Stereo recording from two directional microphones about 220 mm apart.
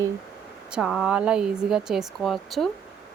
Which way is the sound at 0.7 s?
5° right (ahead or behind).